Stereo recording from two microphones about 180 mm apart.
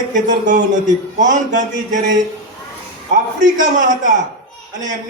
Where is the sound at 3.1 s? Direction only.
45° right (ahead or behind).